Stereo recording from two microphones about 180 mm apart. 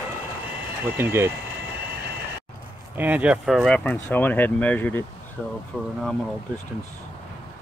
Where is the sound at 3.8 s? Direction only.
10° left (ahead or behind).